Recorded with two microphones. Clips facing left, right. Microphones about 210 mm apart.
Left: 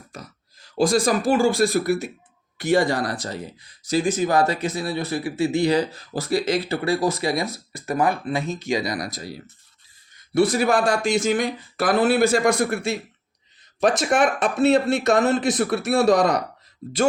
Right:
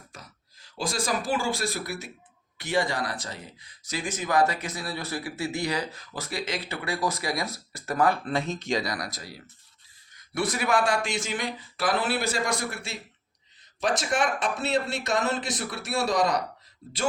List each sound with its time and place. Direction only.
0.8 s speech: 45° left (ahead or behind)